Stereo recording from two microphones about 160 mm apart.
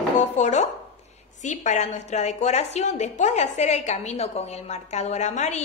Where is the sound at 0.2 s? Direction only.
45° left (ahead or behind).